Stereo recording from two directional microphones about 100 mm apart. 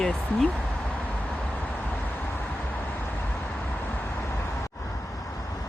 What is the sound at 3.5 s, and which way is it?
Vehicle, 15° left (ahead or behind).